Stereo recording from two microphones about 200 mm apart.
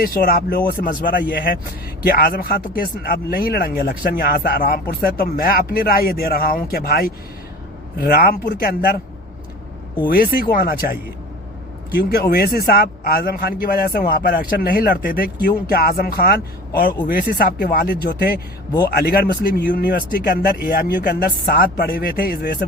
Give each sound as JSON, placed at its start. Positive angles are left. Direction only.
{"t": 0.0, "sound": "a man's voice", "side_deg": 45}
{"t": 10.1, "sound": "a man's voice", "side_deg": 45}
{"t": 12.1, "sound": "a man's voice", "side_deg": 50}